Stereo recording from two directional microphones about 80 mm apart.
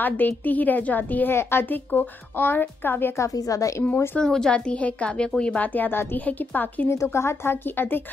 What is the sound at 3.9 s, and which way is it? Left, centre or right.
Speech, left.